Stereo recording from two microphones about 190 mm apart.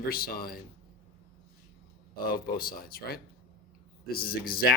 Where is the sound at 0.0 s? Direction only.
55° left (ahead or behind).